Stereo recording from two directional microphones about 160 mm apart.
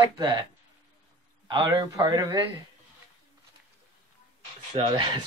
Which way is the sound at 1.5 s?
30° right (ahead or behind).